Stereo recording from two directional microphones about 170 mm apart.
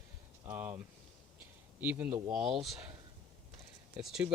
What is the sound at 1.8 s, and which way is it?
Speech, 10° right (ahead or behind).